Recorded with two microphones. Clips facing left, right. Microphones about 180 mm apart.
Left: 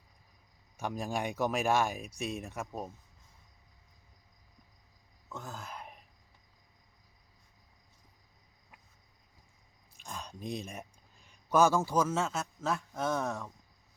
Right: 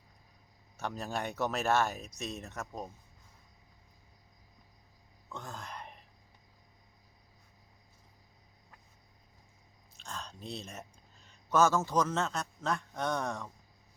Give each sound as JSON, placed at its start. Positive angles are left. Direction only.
{"t": 0.8, "sound": "speech", "side_deg": 10}
{"t": 5.3, "sound": "a sound", "side_deg": 5}
{"t": 9.9, "sound": "speech", "side_deg": 10}